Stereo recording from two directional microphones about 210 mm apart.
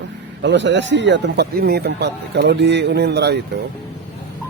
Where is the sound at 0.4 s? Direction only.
60° right (ahead or behind).